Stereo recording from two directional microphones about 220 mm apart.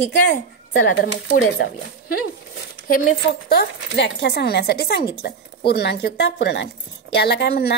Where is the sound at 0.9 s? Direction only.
60° left (ahead or behind).